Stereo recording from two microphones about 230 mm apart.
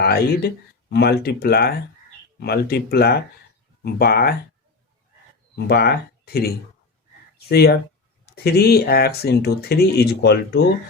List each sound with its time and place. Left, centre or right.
0.0 s speech: left
5.5 s speech: left